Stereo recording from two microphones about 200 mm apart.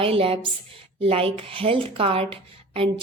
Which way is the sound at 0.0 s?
30° right (ahead or behind).